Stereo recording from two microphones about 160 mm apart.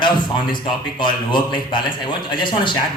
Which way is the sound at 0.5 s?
30° left (ahead or behind).